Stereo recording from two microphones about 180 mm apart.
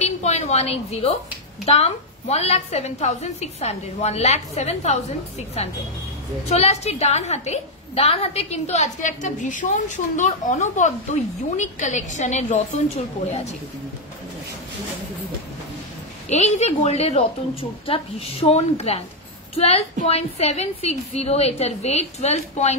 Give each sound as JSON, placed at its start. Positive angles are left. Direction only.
{"t": 0.0, "sound": "a sound", "side_deg": 40}
{"t": 1.7, "sound": "a woman's voice", "side_deg": 35}
{"t": 16.3, "sound": "a woman's voice", "side_deg": 40}